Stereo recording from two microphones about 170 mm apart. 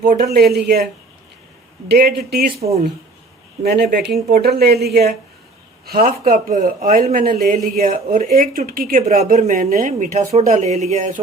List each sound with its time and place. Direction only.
0.0 s speech: 50° right (ahead or behind)
0.3 s a woman's voice: 75° right (ahead or behind)
1.9 s a woman's voice: 65° right (ahead or behind)
2.5 s speech: 35° right (ahead or behind)
3.6 s a woman's voice: 70° right (ahead or behind)
6.2 s a man's voice: 45° right (ahead or behind)